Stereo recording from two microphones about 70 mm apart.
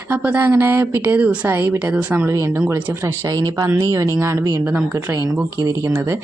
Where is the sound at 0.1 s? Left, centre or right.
Right.